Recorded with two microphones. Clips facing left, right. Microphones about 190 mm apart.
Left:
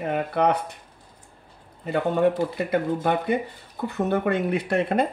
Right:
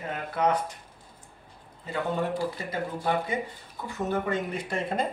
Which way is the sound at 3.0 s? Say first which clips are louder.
Left 5 dB; 60° left (ahead or behind).